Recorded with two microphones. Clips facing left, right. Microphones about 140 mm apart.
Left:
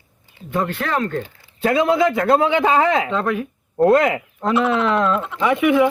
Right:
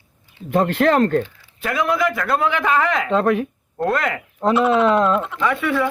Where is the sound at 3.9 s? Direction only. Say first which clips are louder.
Left 6 dB; 20° left (ahead or behind).